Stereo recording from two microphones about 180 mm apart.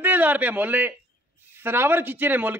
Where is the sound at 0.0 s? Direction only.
10° right (ahead or behind).